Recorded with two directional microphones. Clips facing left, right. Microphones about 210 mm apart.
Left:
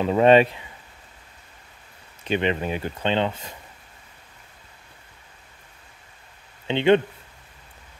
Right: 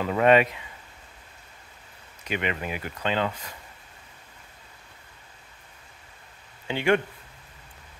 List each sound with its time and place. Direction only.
0.0 s speech: 25° left (ahead or behind)
2.2 s speech: 30° left (ahead or behind)
6.7 s speech: 20° left (ahead or behind)